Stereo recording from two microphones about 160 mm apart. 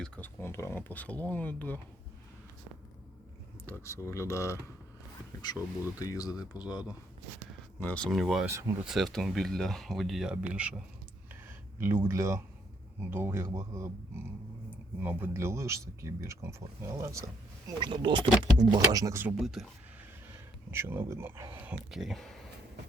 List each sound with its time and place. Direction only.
0.0 s speech: 10° left (ahead or behind)
3.7 s speech: 15° left (ahead or behind)
6.0 s speech: 20° left (ahead or behind)
7.8 s speech: 10° left (ahead or behind); by 10.8 s 5° right (ahead or behind)
11.8 s speech: 15° right (ahead or behind)
19.4 s speech: centre (ahead or behind)
20.7 s speech: 15° right (ahead or behind)